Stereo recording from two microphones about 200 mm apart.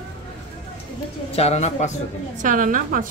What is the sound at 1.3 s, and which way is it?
Speech, 30° left (ahead or behind).